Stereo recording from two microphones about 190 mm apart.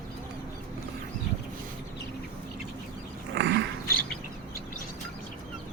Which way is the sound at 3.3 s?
65° right (ahead or behind).